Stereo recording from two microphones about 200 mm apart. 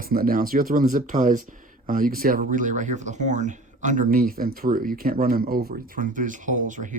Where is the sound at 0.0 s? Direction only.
45° right (ahead or behind).